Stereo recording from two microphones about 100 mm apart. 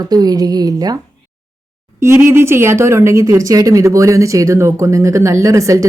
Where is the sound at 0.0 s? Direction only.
40° right (ahead or behind).